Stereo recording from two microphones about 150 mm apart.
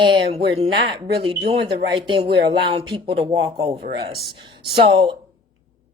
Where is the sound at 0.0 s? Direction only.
35° right (ahead or behind).